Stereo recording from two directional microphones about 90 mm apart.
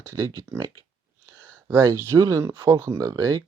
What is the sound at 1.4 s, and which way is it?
Speech, 30° right (ahead or behind).